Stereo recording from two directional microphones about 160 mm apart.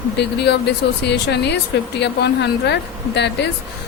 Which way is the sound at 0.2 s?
90° left.